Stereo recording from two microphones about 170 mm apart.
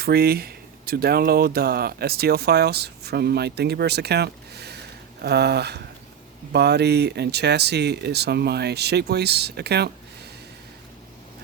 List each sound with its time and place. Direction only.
0.0 s speech: 65° right (ahead or behind)